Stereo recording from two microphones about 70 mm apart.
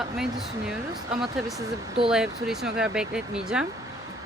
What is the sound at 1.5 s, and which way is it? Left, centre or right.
Speech, right.